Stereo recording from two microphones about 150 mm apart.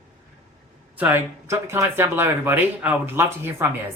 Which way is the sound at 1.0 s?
15° right (ahead or behind).